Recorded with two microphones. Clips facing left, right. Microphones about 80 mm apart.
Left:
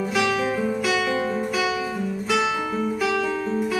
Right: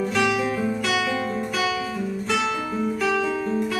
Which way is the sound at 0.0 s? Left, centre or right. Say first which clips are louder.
Even; centre.